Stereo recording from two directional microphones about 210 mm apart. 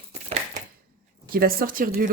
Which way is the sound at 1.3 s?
45° right (ahead or behind).